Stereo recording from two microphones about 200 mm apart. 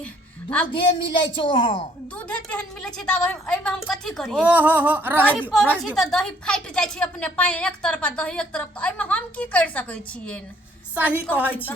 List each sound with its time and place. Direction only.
0.7 s a woman's voice: 25° left (ahead or behind)
2.1 s a woman's voice: 5° left (ahead or behind)
10.9 s a woman's voice: 10° right (ahead or behind)